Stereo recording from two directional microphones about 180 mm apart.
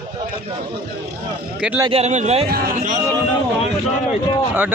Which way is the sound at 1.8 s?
35° right (ahead or behind).